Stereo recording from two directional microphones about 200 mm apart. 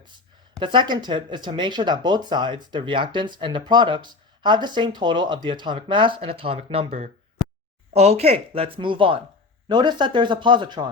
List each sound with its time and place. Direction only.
0.6 s speech: 25° right (ahead or behind)